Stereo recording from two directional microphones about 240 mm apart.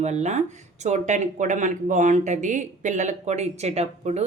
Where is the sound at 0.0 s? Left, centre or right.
Right.